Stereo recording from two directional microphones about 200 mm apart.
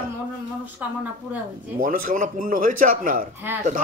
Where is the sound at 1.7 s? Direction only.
45° right (ahead or behind).